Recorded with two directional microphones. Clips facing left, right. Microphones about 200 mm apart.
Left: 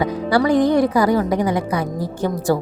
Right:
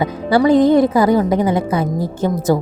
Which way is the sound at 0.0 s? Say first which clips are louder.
Right 3 dB; 25° right (ahead or behind).